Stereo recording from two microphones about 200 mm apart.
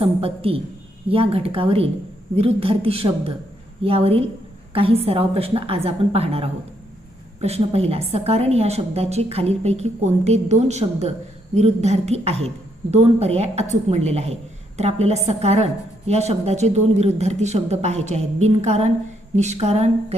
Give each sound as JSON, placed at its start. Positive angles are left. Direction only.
{"t": 0.0, "sound": "a woman's voice", "side_deg": -30}